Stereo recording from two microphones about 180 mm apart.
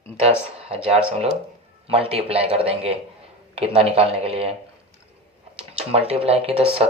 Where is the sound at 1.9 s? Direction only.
30° right (ahead or behind).